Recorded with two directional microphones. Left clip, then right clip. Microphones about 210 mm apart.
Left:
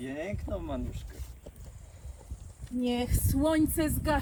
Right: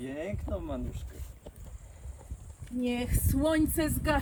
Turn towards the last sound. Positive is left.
turn(degrees=0)  # may be behind; listen again after turning